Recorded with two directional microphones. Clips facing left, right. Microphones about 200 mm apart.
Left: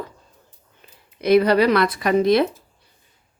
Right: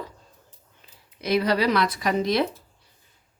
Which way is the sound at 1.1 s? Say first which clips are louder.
Left 7 dB; 55° left (ahead or behind).